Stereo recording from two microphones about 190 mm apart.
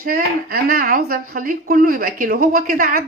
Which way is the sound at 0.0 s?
50° right (ahead or behind).